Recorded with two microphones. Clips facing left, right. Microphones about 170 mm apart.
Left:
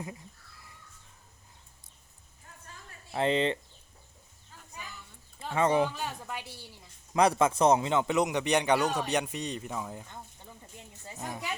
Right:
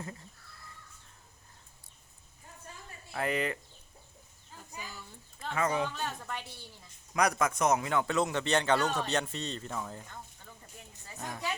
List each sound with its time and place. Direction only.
3.1 s speech: 25° left (ahead or behind)
5.5 s speech: 30° left (ahead or behind)
5.9 s a woman's voice: 10° left (ahead or behind)
7.1 s a man's voice: 25° left (ahead or behind)
11.2 s a woman's voice: 10° left (ahead or behind)